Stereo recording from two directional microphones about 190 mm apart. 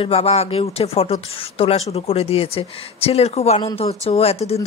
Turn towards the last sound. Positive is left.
turn(degrees=30)  # may be behind; listen again after turning